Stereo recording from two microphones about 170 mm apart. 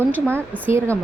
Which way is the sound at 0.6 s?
15° right (ahead or behind).